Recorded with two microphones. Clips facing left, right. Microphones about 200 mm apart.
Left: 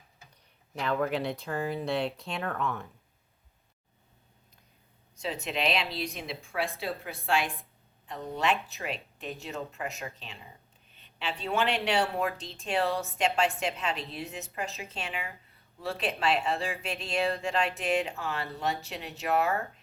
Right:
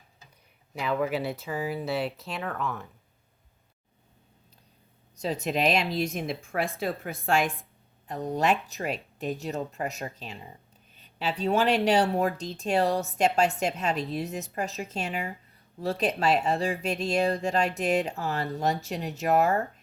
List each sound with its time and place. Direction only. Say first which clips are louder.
0.7 s speech: right 1 dB; 5° right (ahead or behind)
5.1 s a woman's voice: right 5 dB; 40° right (ahead or behind)